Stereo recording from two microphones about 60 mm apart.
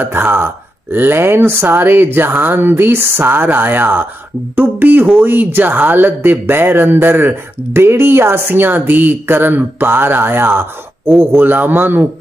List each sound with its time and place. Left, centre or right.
0.0 s speech: right